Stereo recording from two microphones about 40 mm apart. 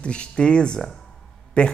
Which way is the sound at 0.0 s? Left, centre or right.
Left.